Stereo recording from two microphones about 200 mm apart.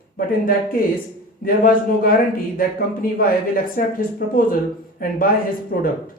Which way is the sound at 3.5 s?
45° left (ahead or behind).